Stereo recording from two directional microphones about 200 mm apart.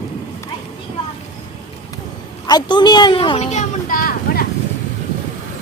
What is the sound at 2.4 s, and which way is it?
A woman's voice, 20° left (ahead or behind).